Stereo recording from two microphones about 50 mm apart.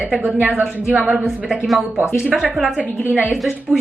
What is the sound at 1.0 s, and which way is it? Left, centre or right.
Speech, centre.